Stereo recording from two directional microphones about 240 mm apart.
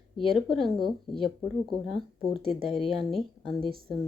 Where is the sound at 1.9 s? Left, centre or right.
Centre.